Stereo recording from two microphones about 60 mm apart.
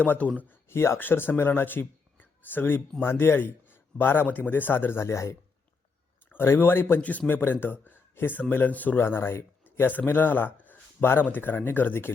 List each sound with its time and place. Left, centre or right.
0.0 s speech: left
0.7 s a man's voice: left
6.3 s a man's voice: left
7.0 s a man's voice: left
9.0 s a man's voice: left